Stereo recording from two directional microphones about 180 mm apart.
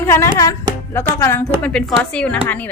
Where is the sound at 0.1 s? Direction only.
15° left (ahead or behind).